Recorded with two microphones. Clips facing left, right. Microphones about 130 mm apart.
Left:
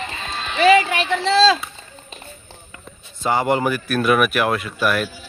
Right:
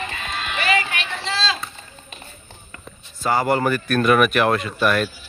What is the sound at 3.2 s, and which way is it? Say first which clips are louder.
Speech: left 1 dB; 20° left (ahead or behind).